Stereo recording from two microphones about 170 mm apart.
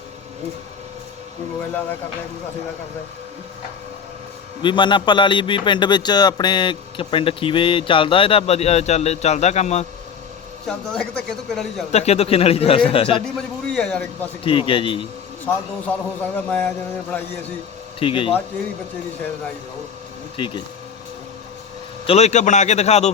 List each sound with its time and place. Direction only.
4.6 s a man's voice: 30° left (ahead or behind)
10.7 s speech: 5° left (ahead or behind)
11.9 s a man's voice: 40° left (ahead or behind)
13.2 s speech: 5° left (ahead or behind)
14.4 s a man's voice: 30° left (ahead or behind)
16.2 s speech: 10° left (ahead or behind)
18.0 s a man's voice: 30° left (ahead or behind)
20.4 s speech: 30° left (ahead or behind)
22.0 s a man's voice: 40° left (ahead or behind)